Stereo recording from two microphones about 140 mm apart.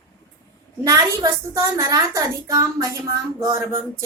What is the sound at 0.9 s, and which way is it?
A woman's voice, 20° right (ahead or behind).